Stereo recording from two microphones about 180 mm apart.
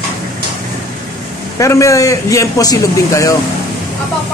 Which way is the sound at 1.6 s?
15° left (ahead or behind).